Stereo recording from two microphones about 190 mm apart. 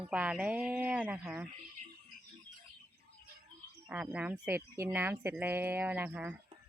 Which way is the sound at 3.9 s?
5° right (ahead or behind).